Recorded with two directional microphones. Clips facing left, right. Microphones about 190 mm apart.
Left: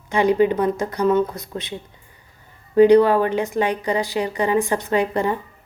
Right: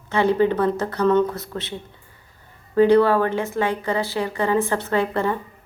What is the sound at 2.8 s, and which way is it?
Speech, 15° left (ahead or behind).